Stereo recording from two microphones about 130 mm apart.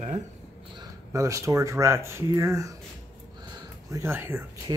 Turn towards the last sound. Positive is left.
turn(degrees=-20)  # may be behind; listen again after turning